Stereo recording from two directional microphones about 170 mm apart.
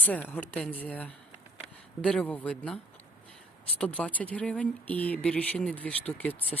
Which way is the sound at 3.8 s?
5° left (ahead or behind).